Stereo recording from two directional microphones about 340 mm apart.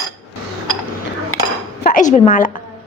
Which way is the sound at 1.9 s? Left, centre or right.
Left.